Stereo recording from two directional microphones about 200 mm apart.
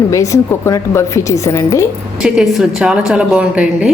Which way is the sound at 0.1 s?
15° left (ahead or behind).